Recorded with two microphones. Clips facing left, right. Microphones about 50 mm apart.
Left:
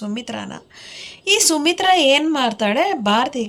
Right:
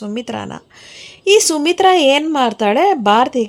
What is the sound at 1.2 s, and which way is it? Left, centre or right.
A woman's voice, centre.